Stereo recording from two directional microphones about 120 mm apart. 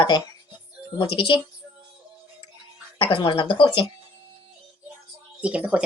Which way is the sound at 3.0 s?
40° left (ahead or behind).